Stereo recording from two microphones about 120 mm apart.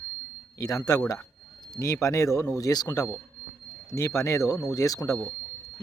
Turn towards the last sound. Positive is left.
turn(degrees=30)  # may be behind; listen again after turning